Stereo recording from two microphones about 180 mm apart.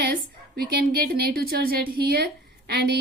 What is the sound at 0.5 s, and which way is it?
A woman's voice, 60° right (ahead or behind).